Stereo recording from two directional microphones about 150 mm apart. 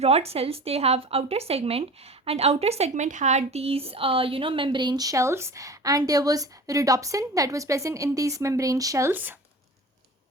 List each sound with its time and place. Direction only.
0.0 s a woman's voice: 45° right (ahead or behind); by 9.3 s 15° right (ahead or behind)